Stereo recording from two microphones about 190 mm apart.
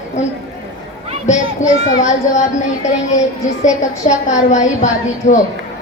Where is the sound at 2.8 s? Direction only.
40° left (ahead or behind).